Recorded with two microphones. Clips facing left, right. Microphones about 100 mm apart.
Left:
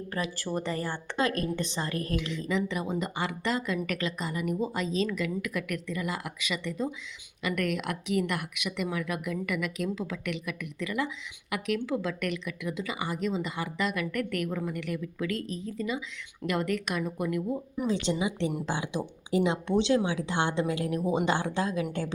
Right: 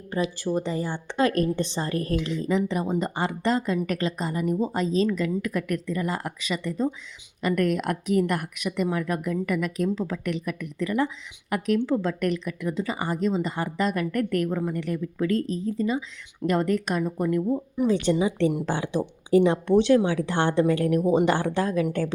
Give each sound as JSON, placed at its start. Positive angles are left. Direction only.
{"t": 0.1, "sound": "speech", "side_deg": -20}
{"t": 1.4, "sound": "speech", "side_deg": -35}